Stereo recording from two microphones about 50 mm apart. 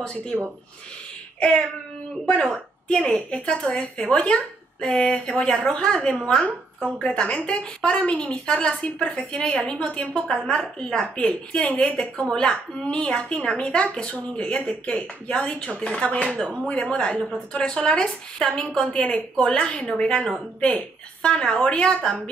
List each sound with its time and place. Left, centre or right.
0.0 s a woman's voice: centre
2.5 s a woman's voice: left
12.3 s speech: centre